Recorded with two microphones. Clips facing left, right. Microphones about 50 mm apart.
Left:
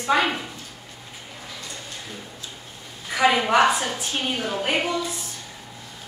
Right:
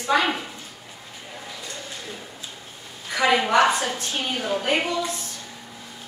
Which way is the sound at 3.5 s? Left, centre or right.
Centre.